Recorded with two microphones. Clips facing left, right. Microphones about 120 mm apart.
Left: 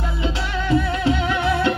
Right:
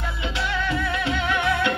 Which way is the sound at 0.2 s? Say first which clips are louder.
Left 1 dB; 35° left (ahead or behind).